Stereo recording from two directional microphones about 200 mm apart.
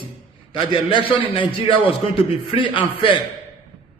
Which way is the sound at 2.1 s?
25° left (ahead or behind).